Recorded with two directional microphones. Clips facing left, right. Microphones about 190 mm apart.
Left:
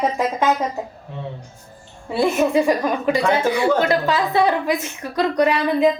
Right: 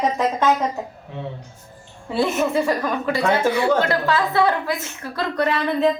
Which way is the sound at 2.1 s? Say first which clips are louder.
Left 3 dB; 15° left (ahead or behind).